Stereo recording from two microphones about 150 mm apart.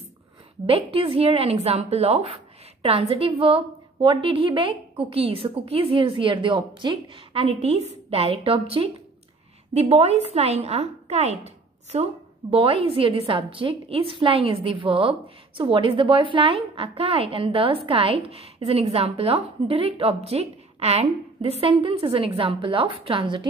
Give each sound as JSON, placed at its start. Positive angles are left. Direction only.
{"t": 0.7, "sound": "a woman's voice", "side_deg": -40}